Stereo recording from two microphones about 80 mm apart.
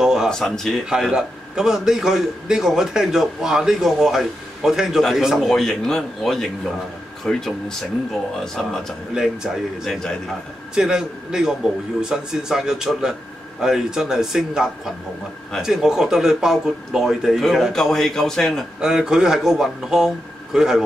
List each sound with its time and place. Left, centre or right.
0.0 s a sound: centre
0.3 s a man's voice: centre
0.8 s a man's voice: centre
9.1 s a man's voice: centre
18.8 s a man's voice: centre